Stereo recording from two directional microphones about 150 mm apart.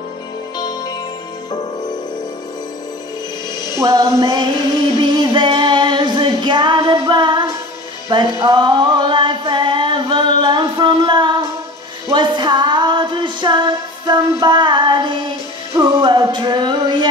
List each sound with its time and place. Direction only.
0.6 s music: 25° left (ahead or behind)
3.8 s music: 20° right (ahead or behind)
5.1 s female singing: 30° right (ahead or behind)
8.1 s a sound: 30° right (ahead or behind)
12.1 s music: 30° right (ahead or behind)